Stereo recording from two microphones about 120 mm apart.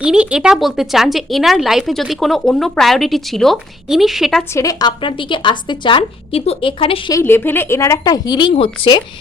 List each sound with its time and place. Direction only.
0.0 s speech: 10° right (ahead or behind)
4.5 s a woman's voice: 30° left (ahead or behind); by 7.0 s 50° left (ahead or behind)
7.1 s speech: 20° left (ahead or behind); by 9.0 s 50° left (ahead or behind)